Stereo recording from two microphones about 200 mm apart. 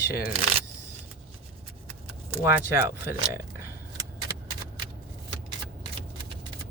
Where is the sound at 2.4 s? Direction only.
10° right (ahead or behind).